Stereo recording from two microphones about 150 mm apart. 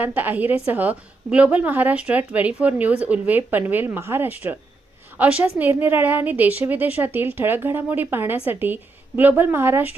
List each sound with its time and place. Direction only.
0.0 s a woman's voice: 15° right (ahead or behind)